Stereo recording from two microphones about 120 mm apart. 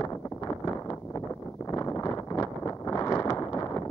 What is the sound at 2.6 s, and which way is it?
Wind noise, 25° left (ahead or behind).